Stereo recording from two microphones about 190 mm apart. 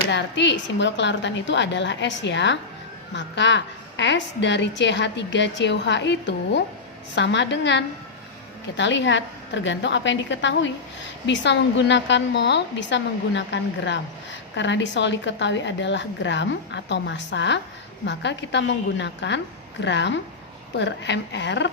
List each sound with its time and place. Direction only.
0.1 s a woman's voice: 65° left (ahead or behind)